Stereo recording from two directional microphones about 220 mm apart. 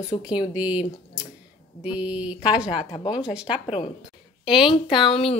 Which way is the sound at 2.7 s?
20° left (ahead or behind).